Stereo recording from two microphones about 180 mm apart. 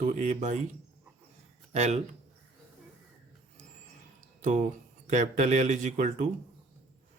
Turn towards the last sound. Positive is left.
turn(degrees=-40)  # may be behind; listen again after turning